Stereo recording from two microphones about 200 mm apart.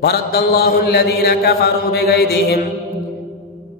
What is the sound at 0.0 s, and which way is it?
Mantra, 55° left (ahead or behind).